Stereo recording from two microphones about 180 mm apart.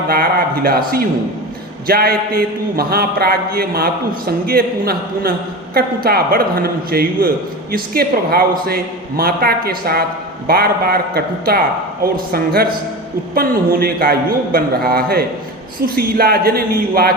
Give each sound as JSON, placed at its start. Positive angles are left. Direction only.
{"t": 0.1, "sound": "a man's voice", "side_deg": -55}